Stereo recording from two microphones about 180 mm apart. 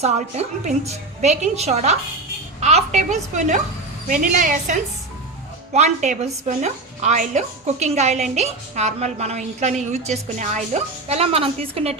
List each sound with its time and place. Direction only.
0.0 s a woman's voice: 35° right (ahead or behind)